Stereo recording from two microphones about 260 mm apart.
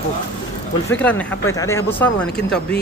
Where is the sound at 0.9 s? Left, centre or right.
Centre.